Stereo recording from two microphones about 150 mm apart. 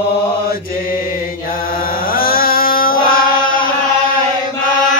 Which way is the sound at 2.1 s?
75° left (ahead or behind).